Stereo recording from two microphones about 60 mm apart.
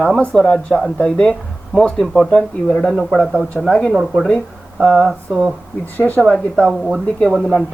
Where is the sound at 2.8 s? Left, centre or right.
Centre.